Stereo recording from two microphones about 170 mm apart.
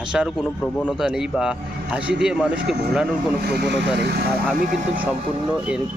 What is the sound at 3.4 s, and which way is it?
Speech, 80° right.